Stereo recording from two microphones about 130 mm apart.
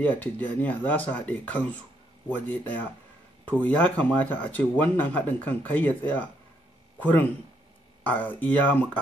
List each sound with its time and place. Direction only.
0.0 s speech: 15° left (ahead or behind)